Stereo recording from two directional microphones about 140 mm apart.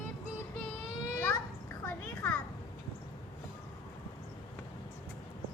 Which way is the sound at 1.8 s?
15° left (ahead or behind).